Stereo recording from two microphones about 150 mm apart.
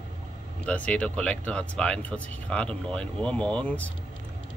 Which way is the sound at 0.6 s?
10° left (ahead or behind).